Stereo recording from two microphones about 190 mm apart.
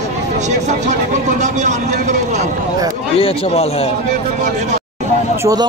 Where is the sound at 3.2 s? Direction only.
30° left (ahead or behind).